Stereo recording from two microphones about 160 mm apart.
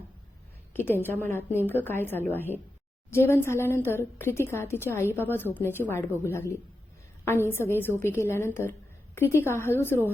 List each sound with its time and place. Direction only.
0.7 s a woman's voice: 15° left (ahead or behind)